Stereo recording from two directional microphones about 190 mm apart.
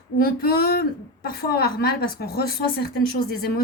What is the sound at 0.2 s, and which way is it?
A woman's voice, 55° left (ahead or behind).